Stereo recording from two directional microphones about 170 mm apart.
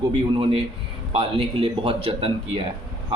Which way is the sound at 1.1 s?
30° right (ahead or behind).